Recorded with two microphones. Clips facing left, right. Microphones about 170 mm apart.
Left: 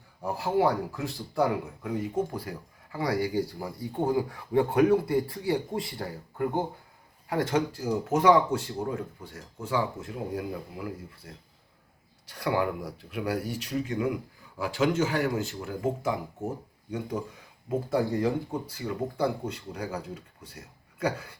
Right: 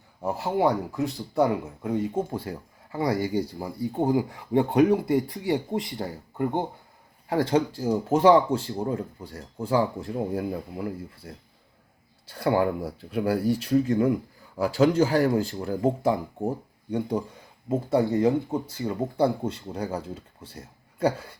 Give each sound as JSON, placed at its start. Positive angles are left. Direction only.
{"t": 0.2, "sound": "speech", "side_deg": -20}
{"t": 17.7, "sound": "speech", "side_deg": -25}